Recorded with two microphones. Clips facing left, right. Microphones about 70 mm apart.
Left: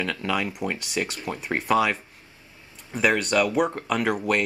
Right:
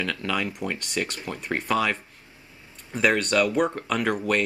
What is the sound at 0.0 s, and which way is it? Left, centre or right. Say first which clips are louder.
Speech: left 1 dB; centre.